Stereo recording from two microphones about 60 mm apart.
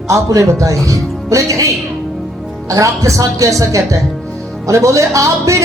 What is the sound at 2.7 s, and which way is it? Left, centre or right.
Speech, right.